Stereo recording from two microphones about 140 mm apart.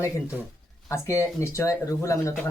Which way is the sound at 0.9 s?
20° left (ahead or behind).